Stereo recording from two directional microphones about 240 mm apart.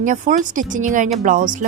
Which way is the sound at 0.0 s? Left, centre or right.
Right.